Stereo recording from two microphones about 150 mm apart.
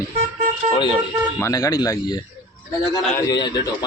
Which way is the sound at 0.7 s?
30° left (ahead or behind).